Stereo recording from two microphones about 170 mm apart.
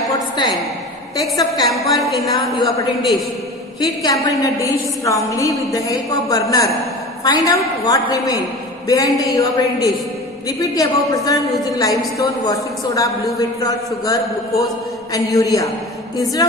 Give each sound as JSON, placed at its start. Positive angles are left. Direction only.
{"t": 0.1, "sound": "a sound", "side_deg": 25}
{"t": 1.9, "sound": "a woman's voice", "side_deg": 0}
{"t": 4.0, "sound": "a woman's voice", "side_deg": 20}